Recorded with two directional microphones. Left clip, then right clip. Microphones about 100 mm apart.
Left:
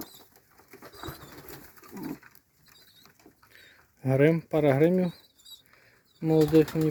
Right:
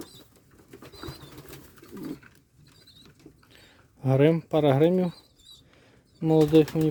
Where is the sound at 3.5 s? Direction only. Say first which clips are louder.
Even; 20° right (ahead or behind).